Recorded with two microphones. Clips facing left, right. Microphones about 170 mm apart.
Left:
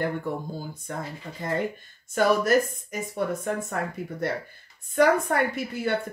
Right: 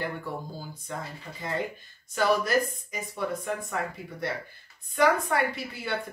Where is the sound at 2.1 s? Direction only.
50° left (ahead or behind).